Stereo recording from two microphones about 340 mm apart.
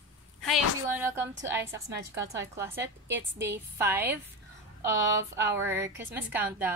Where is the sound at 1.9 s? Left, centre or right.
Right.